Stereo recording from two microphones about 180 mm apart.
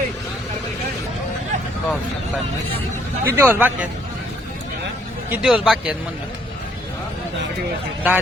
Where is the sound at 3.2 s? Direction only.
15° right (ahead or behind).